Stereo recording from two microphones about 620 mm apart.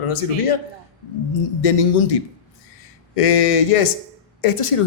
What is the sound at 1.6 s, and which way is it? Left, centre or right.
Speech, left.